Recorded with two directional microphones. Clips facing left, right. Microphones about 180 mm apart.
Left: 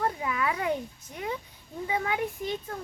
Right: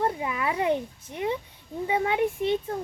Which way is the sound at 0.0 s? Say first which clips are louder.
Right 2 dB; 25° right (ahead or behind).